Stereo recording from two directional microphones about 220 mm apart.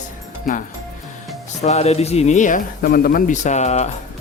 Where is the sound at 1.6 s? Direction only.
30° left (ahead or behind).